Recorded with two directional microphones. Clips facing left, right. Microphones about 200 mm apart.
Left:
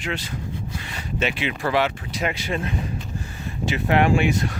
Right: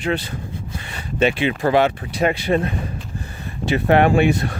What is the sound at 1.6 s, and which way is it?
Speech, 50° right (ahead or behind).